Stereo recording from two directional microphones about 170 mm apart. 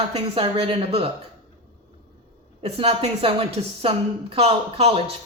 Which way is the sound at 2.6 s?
35° right (ahead or behind).